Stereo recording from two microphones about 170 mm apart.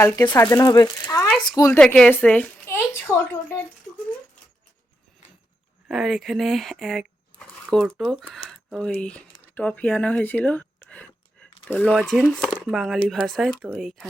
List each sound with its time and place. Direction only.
0.3 s speech: 20° left (ahead or behind)
1.8 s a woman's voice: 10° left (ahead or behind)
5.9 s speech: centre (ahead or behind)
9.4 s a sound: 10° left (ahead or behind)
11.7 s speech: 5° left (ahead or behind)